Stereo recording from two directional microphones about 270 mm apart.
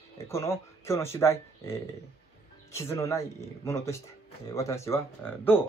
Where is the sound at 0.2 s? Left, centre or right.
Centre.